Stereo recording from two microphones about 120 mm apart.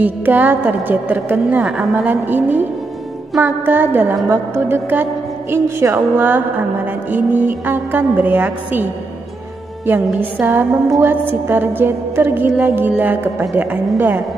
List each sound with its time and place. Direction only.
0.0 s music: 15° right (ahead or behind)
10.4 s music: 15° right (ahead or behind)